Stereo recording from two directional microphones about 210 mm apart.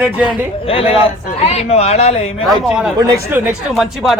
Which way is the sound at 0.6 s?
25° left (ahead or behind).